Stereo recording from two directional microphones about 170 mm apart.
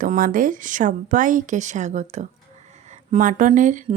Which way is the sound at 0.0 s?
55° right (ahead or behind).